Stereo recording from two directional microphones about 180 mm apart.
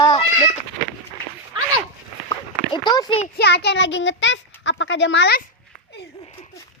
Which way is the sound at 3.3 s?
65° left (ahead or behind).